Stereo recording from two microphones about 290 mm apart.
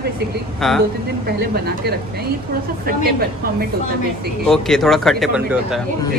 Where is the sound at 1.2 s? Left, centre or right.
Right.